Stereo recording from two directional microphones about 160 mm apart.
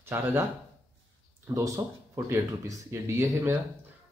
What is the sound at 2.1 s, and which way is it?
Speech, 20° right (ahead or behind).